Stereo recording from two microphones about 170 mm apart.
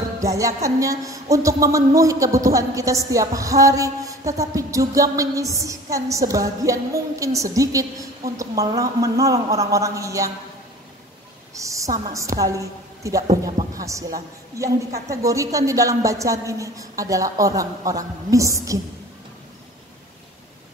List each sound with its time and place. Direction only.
0.2 s a woman's voice: 20° right (ahead or behind)
11.5 s a sound: 20° right (ahead or behind)
12.1 s a woman's voice: 20° right (ahead or behind)